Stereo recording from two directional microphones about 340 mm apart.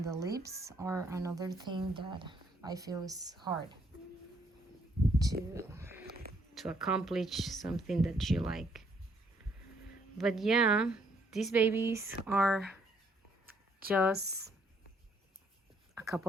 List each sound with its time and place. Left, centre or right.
0.0 s speech: centre
5.2 s speech: centre
10.2 s speech: centre
13.8 s speech: centre
14.1 s speech: right
16.0 s speech: centre